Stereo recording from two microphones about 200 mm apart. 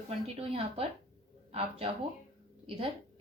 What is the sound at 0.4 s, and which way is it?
A woman's voice, 30° right (ahead or behind).